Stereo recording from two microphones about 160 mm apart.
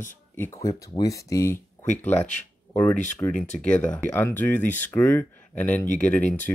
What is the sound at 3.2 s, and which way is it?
Speech, 20° left (ahead or behind).